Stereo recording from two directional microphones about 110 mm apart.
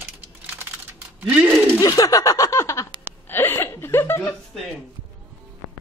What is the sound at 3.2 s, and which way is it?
Chuckle, 20° left (ahead or behind).